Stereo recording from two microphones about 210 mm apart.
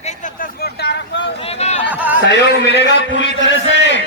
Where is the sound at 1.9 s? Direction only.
5° right (ahead or behind).